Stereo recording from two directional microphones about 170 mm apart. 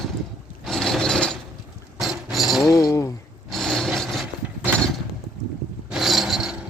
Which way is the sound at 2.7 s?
20° left (ahead or behind).